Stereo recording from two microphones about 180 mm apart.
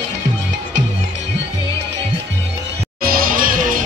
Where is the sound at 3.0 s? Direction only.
55° right (ahead or behind).